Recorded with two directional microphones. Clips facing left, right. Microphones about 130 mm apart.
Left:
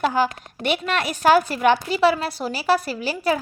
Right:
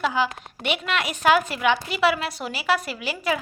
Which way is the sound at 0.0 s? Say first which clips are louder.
Left 3 dB; 45° left (ahead or behind).